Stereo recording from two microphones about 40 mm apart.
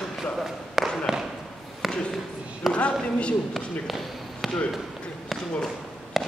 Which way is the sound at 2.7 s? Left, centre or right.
Left.